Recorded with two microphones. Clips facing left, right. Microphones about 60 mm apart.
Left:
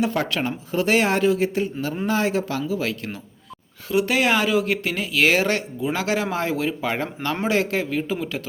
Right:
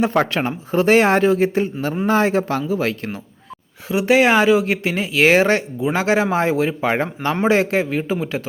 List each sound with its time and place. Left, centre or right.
0.0 s speech: right
3.8 s speech: right